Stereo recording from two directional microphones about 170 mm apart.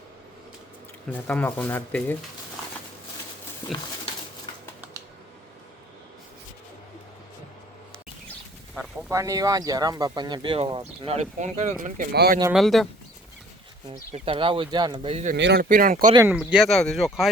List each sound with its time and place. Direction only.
1.1 s speech: 10° left (ahead or behind)
9.0 s speech: 20° right (ahead or behind); by 12.0 s 50° right (ahead or behind)
12.1 s speech: 70° right (ahead or behind)
12.5 s speech: centre (ahead or behind)
14.1 s speech: 35° right (ahead or behind)
15.4 s speech: 75° right (ahead or behind); by 16.1 s 55° right (ahead or behind)
16.2 s speech: 5° right (ahead or behind)